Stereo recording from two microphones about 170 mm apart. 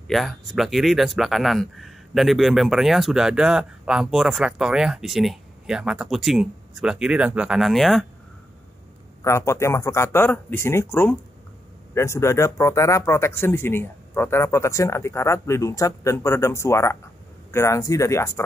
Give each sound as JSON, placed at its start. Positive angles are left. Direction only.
{"t": 0.1, "sound": "speech", "side_deg": 0}
{"t": 9.2, "sound": "speech", "side_deg": 15}